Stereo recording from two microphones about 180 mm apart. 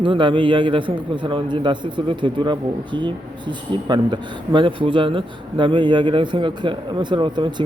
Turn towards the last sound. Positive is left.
turn(degrees=-25)  # may be behind; listen again after turning